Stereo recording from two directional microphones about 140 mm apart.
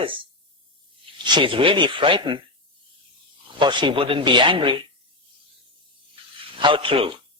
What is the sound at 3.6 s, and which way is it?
Speech, 35° right (ahead or behind).